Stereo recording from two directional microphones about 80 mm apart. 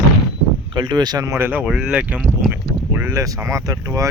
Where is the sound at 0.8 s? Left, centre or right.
Right.